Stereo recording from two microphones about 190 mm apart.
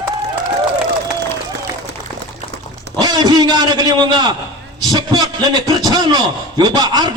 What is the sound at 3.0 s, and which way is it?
A man's voice, 20° right (ahead or behind).